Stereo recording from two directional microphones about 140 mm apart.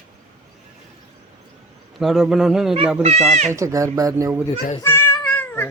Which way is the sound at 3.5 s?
20° right (ahead or behind).